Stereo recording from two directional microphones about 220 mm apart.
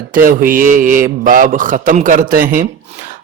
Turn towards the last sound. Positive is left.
turn(degrees=-35)  # may be behind; listen again after turning